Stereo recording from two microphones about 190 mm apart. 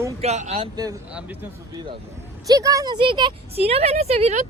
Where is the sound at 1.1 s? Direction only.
5° right (ahead or behind).